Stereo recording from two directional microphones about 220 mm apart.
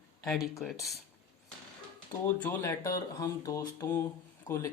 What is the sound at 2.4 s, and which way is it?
Speech, 10° left (ahead or behind).